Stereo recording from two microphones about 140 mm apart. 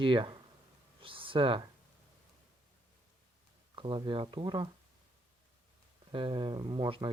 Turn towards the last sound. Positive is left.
turn(degrees=-35)  # may be behind; listen again after turning